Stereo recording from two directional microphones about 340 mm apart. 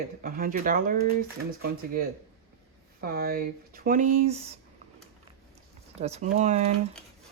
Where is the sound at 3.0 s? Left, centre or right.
Right.